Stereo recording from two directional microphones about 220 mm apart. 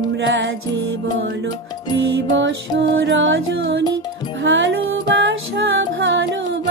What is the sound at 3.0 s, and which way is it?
Music, 60° right (ahead or behind).